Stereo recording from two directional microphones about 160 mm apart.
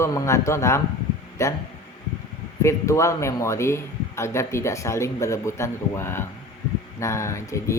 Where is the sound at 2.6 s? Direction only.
20° left (ahead or behind).